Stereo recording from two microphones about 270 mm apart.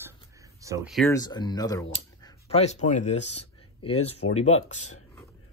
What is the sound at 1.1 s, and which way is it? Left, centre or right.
Speech, centre.